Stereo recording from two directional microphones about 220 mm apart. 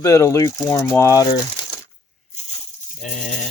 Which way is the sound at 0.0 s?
15° left (ahead or behind).